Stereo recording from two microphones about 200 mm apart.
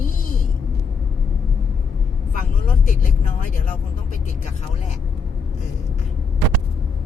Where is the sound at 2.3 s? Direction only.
40° left (ahead or behind).